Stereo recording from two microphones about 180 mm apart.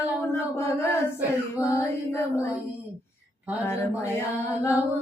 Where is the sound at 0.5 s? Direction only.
15° left (ahead or behind).